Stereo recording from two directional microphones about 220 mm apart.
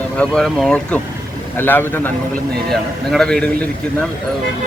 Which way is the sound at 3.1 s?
Centre (ahead or behind).